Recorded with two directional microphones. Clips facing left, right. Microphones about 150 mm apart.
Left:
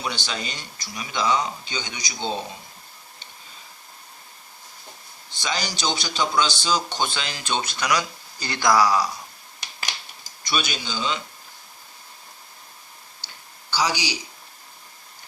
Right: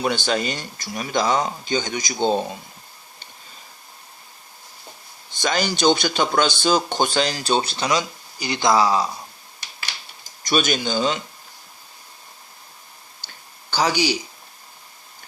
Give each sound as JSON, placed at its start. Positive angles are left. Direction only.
{"t": 0.0, "sound": "speech", "side_deg": -50}
{"t": 5.3, "sound": "speech", "side_deg": -50}
{"t": 10.4, "sound": "speech", "side_deg": -45}
{"t": 13.2, "sound": "a sound", "side_deg": -50}